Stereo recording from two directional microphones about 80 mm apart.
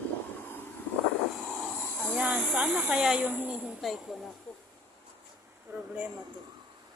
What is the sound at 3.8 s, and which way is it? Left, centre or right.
Speech, centre.